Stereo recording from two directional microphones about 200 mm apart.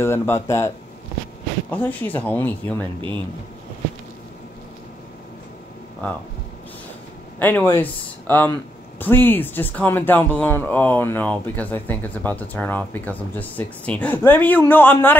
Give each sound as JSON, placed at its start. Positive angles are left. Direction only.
{"t": 0.0, "sound": "speech", "side_deg": 10}
{"t": 1.7, "sound": "speech", "side_deg": 10}
{"t": 7.3, "sound": "speech", "side_deg": 10}